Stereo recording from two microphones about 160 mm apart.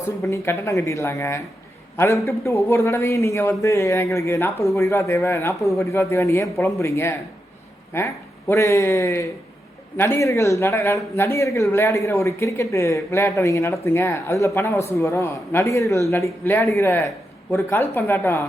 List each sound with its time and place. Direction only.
0.2 s a man's voice: 15° left (ahead or behind)